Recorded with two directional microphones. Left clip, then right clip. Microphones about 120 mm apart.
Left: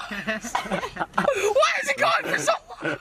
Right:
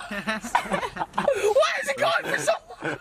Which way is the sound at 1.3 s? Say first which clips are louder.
Even; centre (ahead or behind).